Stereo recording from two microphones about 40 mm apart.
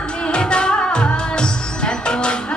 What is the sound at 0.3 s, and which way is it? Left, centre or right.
Music, left.